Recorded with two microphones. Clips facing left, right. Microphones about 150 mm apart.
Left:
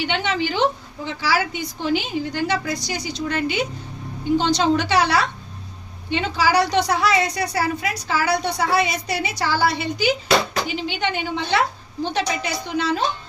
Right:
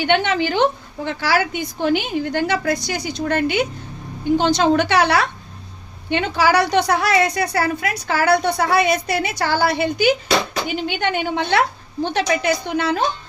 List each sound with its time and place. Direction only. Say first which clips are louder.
0.0 s a woman's voice: right 5 dB; 55° right (ahead or behind)